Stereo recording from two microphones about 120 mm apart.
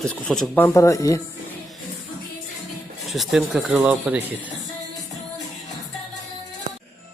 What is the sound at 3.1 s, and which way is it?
Speech, centre (ahead or behind).